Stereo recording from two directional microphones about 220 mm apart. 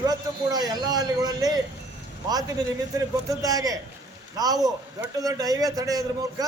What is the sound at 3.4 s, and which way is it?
A man's voice, 15° right (ahead or behind).